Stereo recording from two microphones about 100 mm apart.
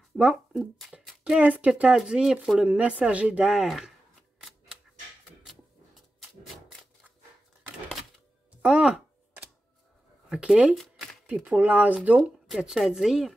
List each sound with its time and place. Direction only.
0.2 s speech: 5° right (ahead or behind)
4.4 s typewriter: 5° right (ahead or behind)
6.1 s a sound: centre (ahead or behind)
8.6 s music: 10° right (ahead or behind)
10.3 s speech: 10° right (ahead or behind)
10.8 s shuffling cards: 5° left (ahead or behind)
11.4 s speech: 15° right (ahead or behind)
12.2 s speech: 5° right (ahead or behind)